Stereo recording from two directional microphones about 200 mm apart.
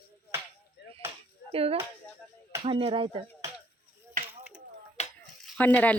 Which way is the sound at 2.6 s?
25° right (ahead or behind).